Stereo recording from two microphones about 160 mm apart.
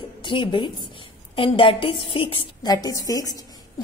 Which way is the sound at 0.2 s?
30° left (ahead or behind).